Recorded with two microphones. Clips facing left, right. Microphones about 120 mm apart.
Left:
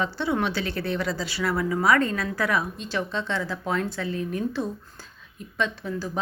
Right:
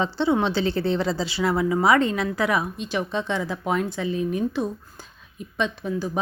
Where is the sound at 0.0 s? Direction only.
25° right (ahead or behind).